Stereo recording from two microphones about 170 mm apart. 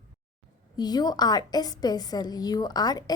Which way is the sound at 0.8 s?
25° left (ahead or behind).